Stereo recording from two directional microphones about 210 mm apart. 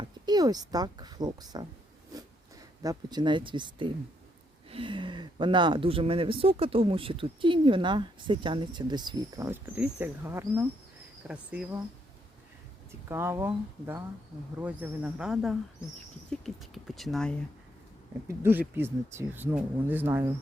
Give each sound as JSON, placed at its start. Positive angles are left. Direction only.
{"t": 0.3, "sound": "speech", "side_deg": -20}
{"t": 2.8, "sound": "speech", "side_deg": -20}
{"t": 13.1, "sound": "speech", "side_deg": -10}
{"t": 18.3, "sound": "speech", "side_deg": -10}